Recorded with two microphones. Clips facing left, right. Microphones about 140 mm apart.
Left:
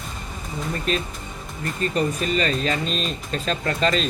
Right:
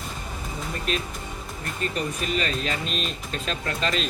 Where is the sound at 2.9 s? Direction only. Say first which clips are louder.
Left 4 dB; 35° left (ahead or behind).